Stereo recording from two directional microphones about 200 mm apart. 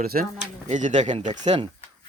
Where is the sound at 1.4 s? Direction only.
25° right (ahead or behind).